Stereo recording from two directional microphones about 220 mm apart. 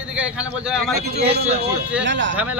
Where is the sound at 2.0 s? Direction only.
55° right (ahead or behind).